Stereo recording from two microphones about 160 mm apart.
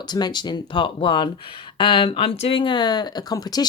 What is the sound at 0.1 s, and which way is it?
Speech, 25° left (ahead or behind).